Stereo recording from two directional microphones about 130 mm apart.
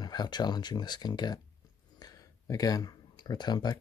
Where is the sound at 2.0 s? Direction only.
30° left (ahead or behind).